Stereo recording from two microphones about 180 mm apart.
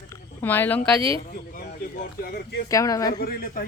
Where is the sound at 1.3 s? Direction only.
55° left (ahead or behind).